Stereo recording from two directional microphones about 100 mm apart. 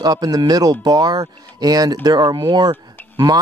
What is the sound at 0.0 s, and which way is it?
Speech, 40° right (ahead or behind).